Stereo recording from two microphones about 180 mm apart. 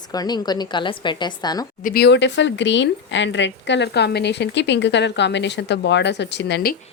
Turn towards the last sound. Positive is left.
turn(degrees=65)  # may be behind; listen again after turning